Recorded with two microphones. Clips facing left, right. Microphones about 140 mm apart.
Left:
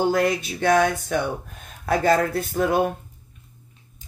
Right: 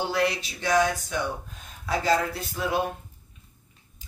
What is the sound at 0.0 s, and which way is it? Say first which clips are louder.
Music: left 5 dB; 50° left (ahead or behind).